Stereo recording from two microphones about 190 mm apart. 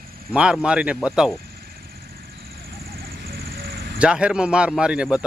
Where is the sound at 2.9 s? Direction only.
55° right (ahead or behind).